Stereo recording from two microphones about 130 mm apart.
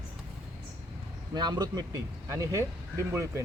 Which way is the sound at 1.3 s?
30° right (ahead or behind).